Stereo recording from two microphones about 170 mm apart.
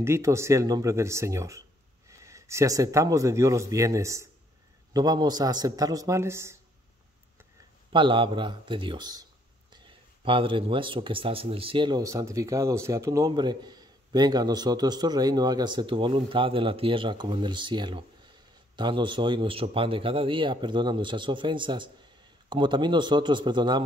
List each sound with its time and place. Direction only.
0.0 s speech: 15° right (ahead or behind)
7.9 s speech: 30° right (ahead or behind)